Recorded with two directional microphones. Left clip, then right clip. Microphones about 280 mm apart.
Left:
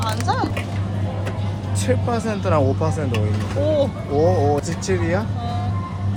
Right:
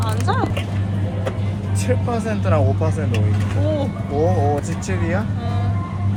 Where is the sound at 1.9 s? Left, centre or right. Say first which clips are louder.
Left 1 dB; left.